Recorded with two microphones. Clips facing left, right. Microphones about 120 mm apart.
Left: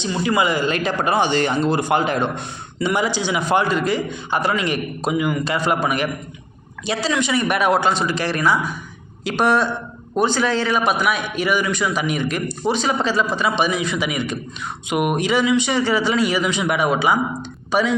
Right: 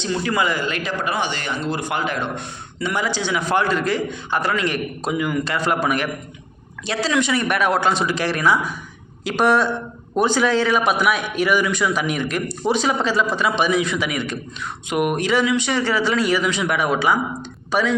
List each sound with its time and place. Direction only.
0.0 s a man's voice: 10° left (ahead or behind)
0.7 s a man's voice: 30° left (ahead or behind)
2.7 s a man's voice: 15° left (ahead or behind)